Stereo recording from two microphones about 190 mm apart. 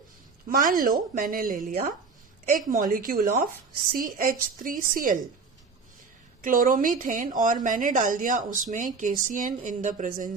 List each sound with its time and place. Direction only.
0.4 s a woman's voice: 45° right (ahead or behind)
6.4 s a woman's voice: 45° right (ahead or behind)